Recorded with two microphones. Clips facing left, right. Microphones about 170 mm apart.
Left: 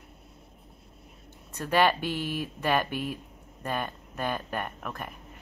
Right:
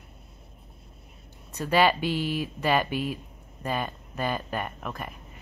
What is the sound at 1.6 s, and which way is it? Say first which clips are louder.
Speech: right 2 dB; 10° right (ahead or behind).